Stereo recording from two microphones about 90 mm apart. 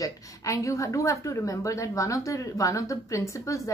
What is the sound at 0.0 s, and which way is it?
Speech, 35° left (ahead or behind).